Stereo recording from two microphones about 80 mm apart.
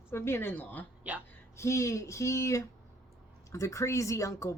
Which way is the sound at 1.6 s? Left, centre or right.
Left.